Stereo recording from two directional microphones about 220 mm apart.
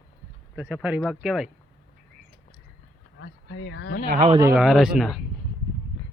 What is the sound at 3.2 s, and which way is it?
Speech, 55° left (ahead or behind).